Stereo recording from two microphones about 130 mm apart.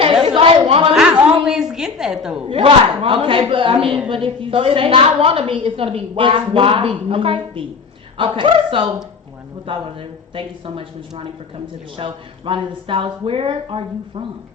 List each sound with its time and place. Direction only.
0.0 s chatter: 45° right (ahead or behind)
1.5 s a sound: 5° right (ahead or behind)
2.5 s a woman's voice: 45° right (ahead or behind)
11.9 s a woman's voice: 45° right (ahead or behind)